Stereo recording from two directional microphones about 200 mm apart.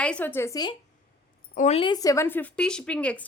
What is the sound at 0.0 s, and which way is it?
Speech, 5° left (ahead or behind).